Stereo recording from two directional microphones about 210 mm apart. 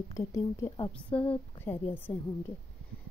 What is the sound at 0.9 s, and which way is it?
A woman's voice, 5° left (ahead or behind).